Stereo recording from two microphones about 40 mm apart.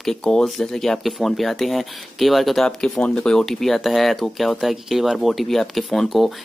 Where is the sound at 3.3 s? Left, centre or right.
Centre.